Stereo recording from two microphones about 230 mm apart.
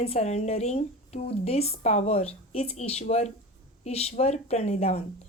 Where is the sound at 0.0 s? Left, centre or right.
Left.